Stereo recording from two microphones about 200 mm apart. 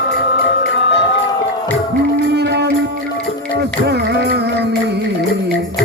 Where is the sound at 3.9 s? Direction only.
55° right (ahead or behind).